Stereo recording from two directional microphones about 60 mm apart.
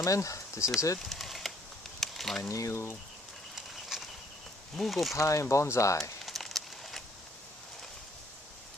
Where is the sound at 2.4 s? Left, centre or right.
Left.